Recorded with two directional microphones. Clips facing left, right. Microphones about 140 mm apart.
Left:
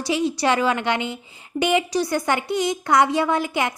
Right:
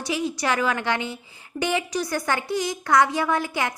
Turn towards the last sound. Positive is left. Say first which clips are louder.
# left 2 dB
turn(degrees=20)  # may be behind; listen again after turning